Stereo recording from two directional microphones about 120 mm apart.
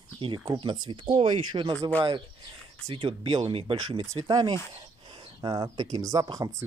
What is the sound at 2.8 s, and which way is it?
Speech, 50° right (ahead or behind).